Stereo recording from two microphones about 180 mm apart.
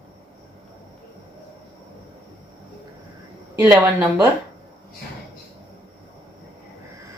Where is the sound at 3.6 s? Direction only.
10° right (ahead or behind).